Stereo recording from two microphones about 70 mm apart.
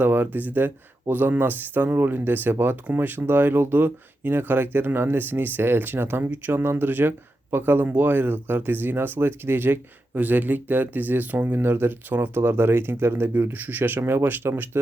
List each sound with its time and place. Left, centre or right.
0.0 s speech: right